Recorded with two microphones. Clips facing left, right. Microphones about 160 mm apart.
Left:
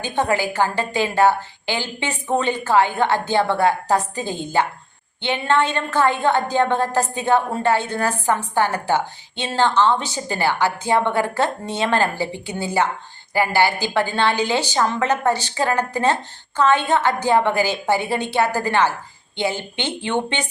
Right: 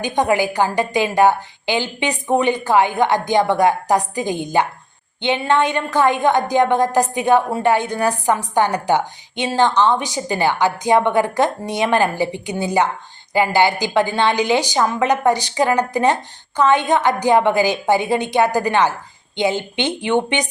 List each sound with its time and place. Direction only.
0.0 s a woman's voice: 15° right (ahead or behind)